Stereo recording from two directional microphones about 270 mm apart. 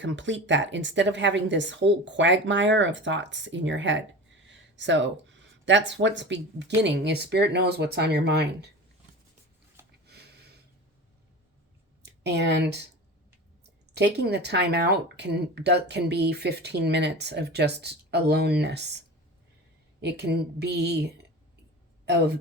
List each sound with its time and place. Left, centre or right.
0.0 s speech: right
10.1 s a sound: right
12.0 s speech: right
13.9 s speech: right